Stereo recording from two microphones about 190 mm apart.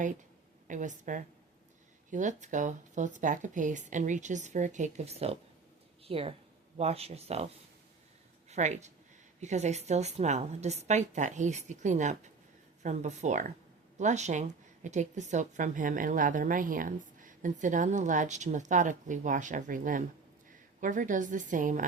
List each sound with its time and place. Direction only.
0.7 s a woman's voice: 40° right (ahead or behind)